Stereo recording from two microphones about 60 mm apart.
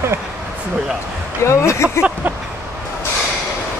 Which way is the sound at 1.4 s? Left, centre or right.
Left.